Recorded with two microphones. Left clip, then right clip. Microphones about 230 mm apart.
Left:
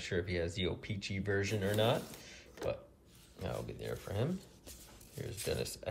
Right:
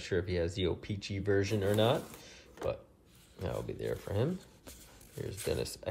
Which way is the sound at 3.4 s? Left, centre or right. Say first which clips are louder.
Right 4 dB; right.